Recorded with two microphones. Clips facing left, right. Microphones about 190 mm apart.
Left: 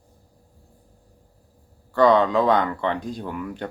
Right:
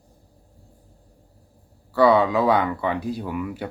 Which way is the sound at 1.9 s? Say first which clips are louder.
Even; 10° right (ahead or behind).